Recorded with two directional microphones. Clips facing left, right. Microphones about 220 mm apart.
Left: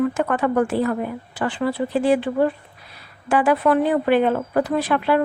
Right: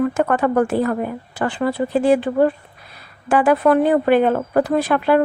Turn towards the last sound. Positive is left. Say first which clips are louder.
# right 3 dB
turn(degrees=-45)  # may be behind; listen again after turning